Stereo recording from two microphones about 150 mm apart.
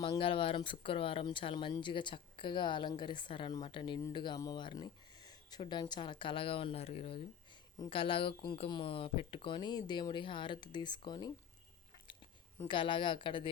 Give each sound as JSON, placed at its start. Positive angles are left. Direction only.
{"t": 0.0, "sound": "speech", "side_deg": 35}
{"t": 12.6, "sound": "speech", "side_deg": 35}